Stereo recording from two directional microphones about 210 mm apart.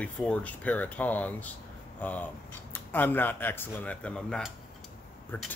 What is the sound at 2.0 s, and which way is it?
Speech, 10° left (ahead or behind).